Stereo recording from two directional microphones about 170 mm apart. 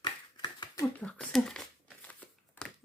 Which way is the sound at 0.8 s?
5° left (ahead or behind).